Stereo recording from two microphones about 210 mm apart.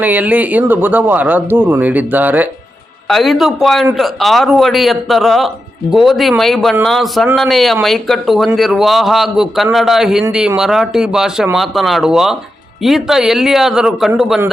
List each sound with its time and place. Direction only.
0.0 s speech: 5° right (ahead or behind)